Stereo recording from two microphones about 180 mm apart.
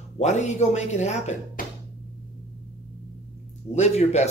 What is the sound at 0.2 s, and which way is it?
A man's voice, 40° left (ahead or behind).